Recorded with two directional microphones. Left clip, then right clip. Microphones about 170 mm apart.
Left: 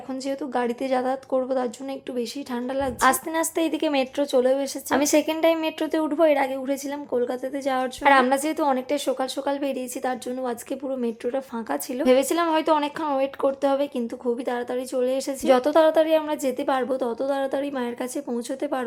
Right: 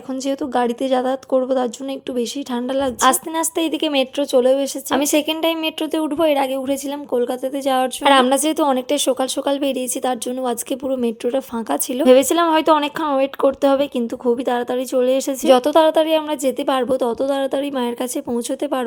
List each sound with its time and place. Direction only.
0.1 s a woman's voice: 30° right (ahead or behind)